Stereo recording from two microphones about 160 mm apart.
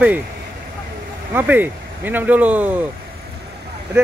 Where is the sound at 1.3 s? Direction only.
10° right (ahead or behind).